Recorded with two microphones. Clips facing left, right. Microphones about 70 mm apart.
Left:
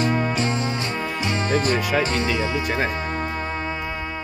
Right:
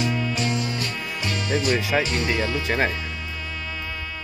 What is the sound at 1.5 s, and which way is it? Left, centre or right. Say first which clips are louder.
Speech: left 1 dB; left.